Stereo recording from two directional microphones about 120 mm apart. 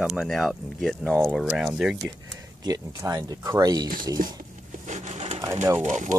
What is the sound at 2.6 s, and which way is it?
Speech, 35° right (ahead or behind).